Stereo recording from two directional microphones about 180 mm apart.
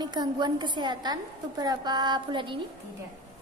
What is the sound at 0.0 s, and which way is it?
A woman's voice, 25° right (ahead or behind).